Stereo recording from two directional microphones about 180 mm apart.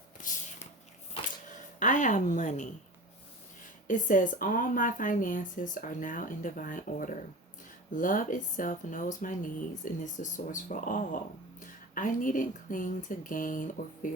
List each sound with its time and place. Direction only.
0.2 s a sound: 45° left (ahead or behind)
1.8 s speech: 45° left (ahead or behind)
3.8 s speech: 45° left (ahead or behind)